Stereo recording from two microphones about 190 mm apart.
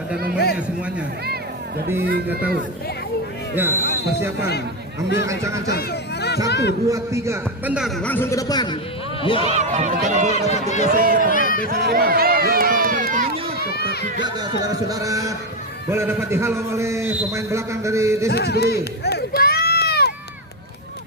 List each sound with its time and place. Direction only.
2.0 s speech: 55° right (ahead or behind)
3.5 s a man's voice: 10° right (ahead or behind)
4.9 s a man's voice: 15° right (ahead or behind)
5.6 s a man's voice: 60° left (ahead or behind)
6.8 s a man's voice: 15° right (ahead or behind); by 9.5 s 30° left (ahead or behind)
9.5 s speech: 35° right (ahead or behind)
10.4 s speech: 35° left (ahead or behind)
10.8 s speech: 50° right (ahead or behind)
11.3 s a sound: 45° left (ahead or behind)
11.7 s run: 55° right (ahead or behind)
13.6 s run: 55° left (ahead or behind)
14.2 s a man's voice: 20° right (ahead or behind)
18.3 s run: 60° left (ahead or behind)